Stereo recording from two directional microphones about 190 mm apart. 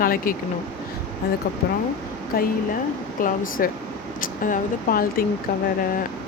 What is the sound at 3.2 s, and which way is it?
Speech, 45° left (ahead or behind).